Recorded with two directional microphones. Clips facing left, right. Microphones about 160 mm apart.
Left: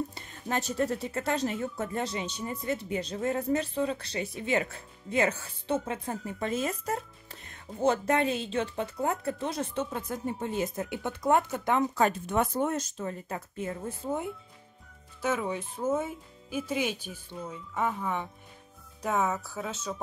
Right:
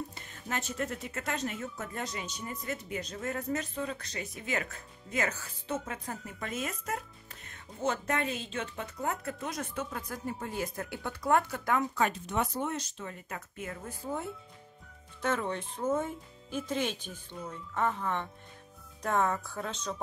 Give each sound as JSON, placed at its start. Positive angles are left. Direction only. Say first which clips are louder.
{"t": 0.1, "sound": "speech", "louder": "left 5 dB", "side_deg": 35}
{"t": 11.9, "sound": "speech", "louder": "left 4 dB", "side_deg": 35}
{"t": 12.3, "sound": "speech", "louder": "left 5 dB", "side_deg": 50}
{"t": 15.2, "sound": "speech", "louder": "left 2 dB", "side_deg": 10}